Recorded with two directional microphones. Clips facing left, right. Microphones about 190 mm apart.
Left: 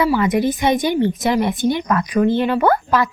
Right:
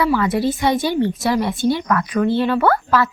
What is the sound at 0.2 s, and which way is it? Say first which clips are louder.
A woman's voice: left 1 dB; 20° left (ahead or behind).